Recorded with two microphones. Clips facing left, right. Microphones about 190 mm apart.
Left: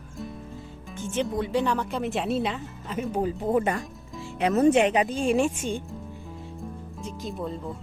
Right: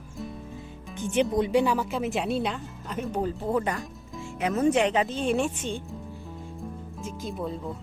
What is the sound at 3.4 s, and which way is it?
Speech, 20° left (ahead or behind).